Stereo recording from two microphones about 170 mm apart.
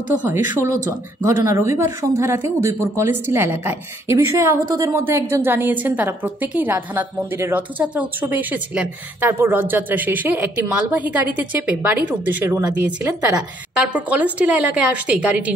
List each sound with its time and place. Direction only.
0.2 s speech: 15° right (ahead or behind)